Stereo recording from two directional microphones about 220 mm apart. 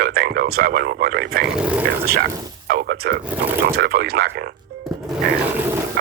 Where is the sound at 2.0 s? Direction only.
45° right (ahead or behind).